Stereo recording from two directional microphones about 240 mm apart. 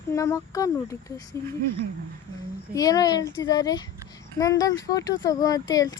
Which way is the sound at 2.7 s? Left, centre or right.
Centre.